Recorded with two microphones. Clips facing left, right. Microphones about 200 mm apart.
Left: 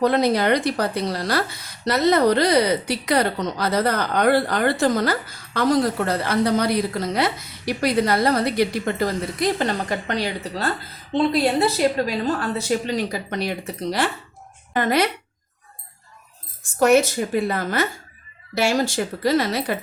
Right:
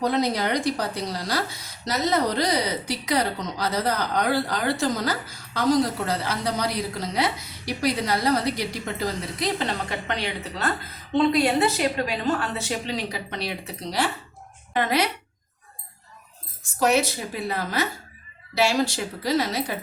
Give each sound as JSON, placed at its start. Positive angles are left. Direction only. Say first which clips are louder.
{"t": 0.0, "sound": "a woman's voice", "louder": "left 5 dB", "side_deg": 60}
{"t": 16.9, "sound": "a woman's voice", "louder": "left 7 dB", "side_deg": 50}